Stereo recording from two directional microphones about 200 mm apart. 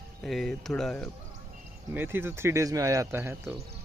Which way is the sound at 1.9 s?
10° right (ahead or behind).